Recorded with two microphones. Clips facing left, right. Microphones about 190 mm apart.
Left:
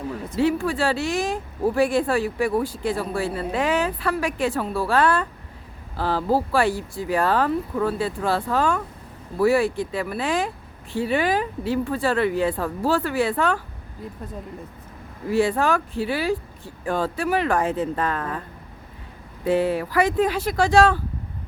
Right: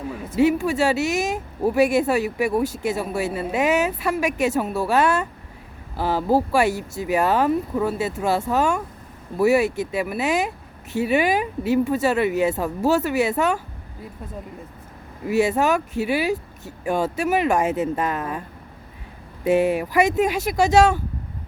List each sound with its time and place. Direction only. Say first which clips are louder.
0.3 s speech: right 3 dB; 10° right (ahead or behind)
4.4 s a woman's voice: right 3 dB; 20° right (ahead or behind)
4.6 s speech: right 1 dB; 10° right (ahead or behind)
15.3 s speech: right 1 dB; 10° right (ahead or behind)
19.5 s speech: right 2 dB; 15° right (ahead or behind)